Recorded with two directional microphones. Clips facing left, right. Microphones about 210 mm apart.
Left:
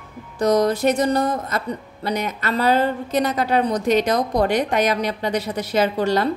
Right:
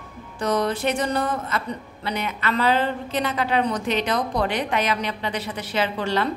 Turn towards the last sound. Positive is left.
turn(degrees=40)  # may be behind; listen again after turning